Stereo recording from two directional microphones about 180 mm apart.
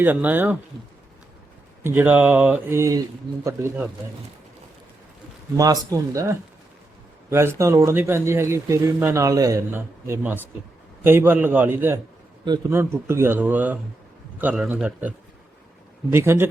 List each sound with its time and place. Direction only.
0.0 s speech: 10° right (ahead or behind)
1.8 s speech: 10° right (ahead or behind)
5.5 s speech: 20° right (ahead or behind)
16.1 s speech: 15° right (ahead or behind)